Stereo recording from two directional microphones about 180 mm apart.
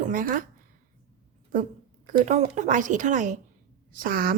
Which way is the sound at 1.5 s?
45° right (ahead or behind).